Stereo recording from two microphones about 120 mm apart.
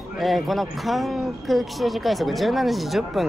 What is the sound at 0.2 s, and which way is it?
Speech, centre (ahead or behind).